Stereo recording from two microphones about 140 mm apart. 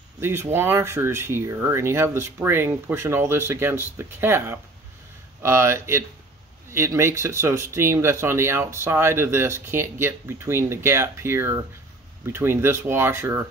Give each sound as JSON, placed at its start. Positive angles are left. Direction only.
{"t": 0.2, "sound": "speech", "side_deg": -15}